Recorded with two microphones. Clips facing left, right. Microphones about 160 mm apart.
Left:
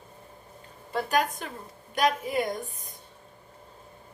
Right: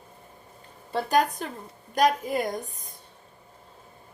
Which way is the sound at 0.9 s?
35° right (ahead or behind).